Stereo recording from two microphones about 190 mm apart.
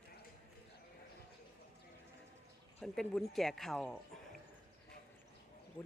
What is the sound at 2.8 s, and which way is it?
Speech, centre (ahead or behind).